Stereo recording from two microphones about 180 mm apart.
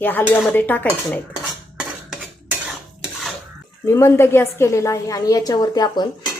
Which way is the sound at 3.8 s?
15° left (ahead or behind).